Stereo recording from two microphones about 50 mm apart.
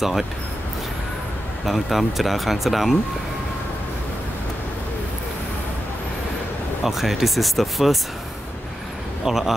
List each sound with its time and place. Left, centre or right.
1.7 s speech: centre
6.8 s speech: centre
9.2 s speech: centre